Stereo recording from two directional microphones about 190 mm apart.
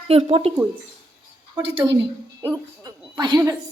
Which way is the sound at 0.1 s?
30° right (ahead or behind).